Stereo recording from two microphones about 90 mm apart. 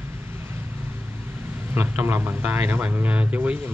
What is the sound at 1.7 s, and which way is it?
A man's voice, 25° right (ahead or behind).